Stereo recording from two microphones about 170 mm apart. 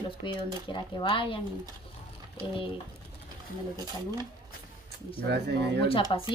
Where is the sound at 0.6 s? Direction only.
30° left (ahead or behind).